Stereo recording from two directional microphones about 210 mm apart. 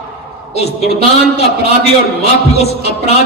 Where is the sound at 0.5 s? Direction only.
30° left (ahead or behind).